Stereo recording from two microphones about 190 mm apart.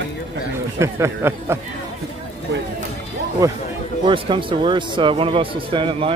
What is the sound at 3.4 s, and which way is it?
Speech, 15° right (ahead or behind).